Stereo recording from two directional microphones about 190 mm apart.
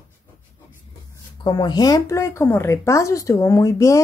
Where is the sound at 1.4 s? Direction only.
20° left (ahead or behind).